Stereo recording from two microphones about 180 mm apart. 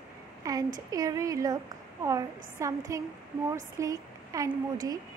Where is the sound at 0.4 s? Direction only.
20° right (ahead or behind).